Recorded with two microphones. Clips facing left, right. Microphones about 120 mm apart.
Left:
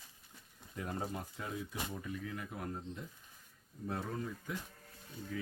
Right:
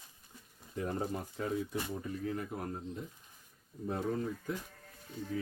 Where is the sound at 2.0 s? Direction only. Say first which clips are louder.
Right 5 dB; 40° right (ahead or behind).